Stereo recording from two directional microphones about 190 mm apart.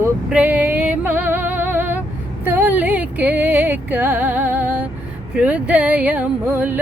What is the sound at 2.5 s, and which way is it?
Music, 10° right (ahead or behind).